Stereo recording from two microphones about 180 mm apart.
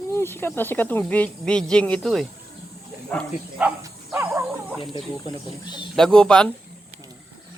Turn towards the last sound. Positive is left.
turn(degrees=5)  # may be behind; listen again after turning